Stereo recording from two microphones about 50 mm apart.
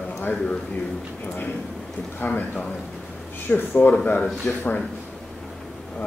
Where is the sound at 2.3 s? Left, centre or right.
Left.